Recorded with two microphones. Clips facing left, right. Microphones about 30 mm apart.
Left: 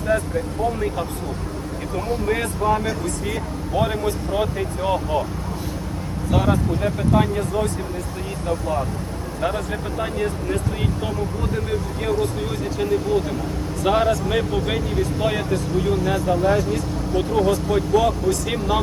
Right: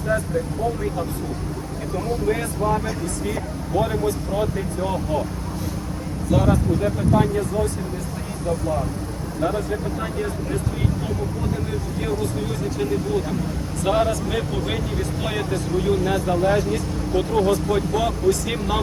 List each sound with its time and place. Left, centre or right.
2.2 s speech: left
6.3 s speech: left
13.8 s speech: centre